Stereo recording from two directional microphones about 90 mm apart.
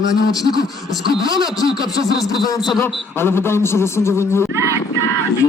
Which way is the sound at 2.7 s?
30° left (ahead or behind).